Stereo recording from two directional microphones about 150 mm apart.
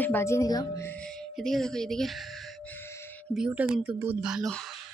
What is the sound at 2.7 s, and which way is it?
Music, 15° left (ahead or behind).